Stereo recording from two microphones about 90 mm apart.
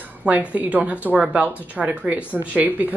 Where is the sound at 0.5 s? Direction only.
15° right (ahead or behind).